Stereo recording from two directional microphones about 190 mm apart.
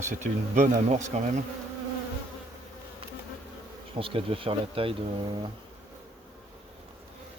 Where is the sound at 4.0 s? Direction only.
30° right (ahead or behind).